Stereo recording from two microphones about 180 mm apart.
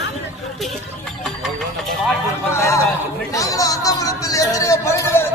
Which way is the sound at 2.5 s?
15° left (ahead or behind).